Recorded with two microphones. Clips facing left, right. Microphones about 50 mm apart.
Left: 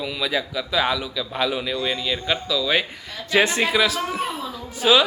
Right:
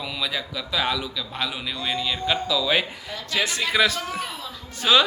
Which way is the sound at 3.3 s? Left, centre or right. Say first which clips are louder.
Left 6 dB; left.